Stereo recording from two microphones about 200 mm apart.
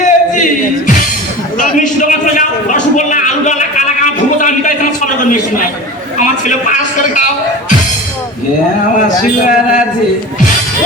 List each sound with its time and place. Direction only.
0.0 s music: 40° left (ahead or behind)
1.5 s a sound: 40° left (ahead or behind)
9.0 s a man's voice: 40° left (ahead or behind)